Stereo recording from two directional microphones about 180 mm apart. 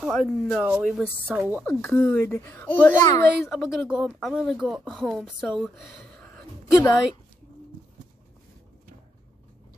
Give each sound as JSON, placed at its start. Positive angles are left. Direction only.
{"t": 0.0, "sound": "speech", "side_deg": 0}
{"t": 1.6, "sound": "speech", "side_deg": 15}
{"t": 6.1, "sound": "gasp", "side_deg": 5}